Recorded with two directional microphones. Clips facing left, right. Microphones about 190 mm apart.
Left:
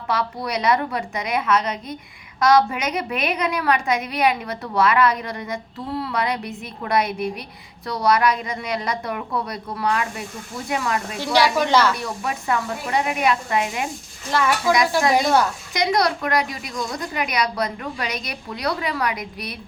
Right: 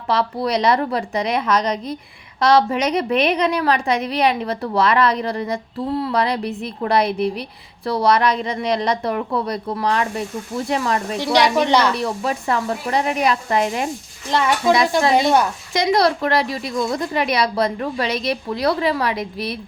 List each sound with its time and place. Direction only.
0.1 s a woman's voice: 30° right (ahead or behind)
11.2 s a woman's voice: 20° right (ahead or behind)
11.9 s a woman's voice: 30° right (ahead or behind)
14.3 s a woman's voice: 20° right (ahead or behind)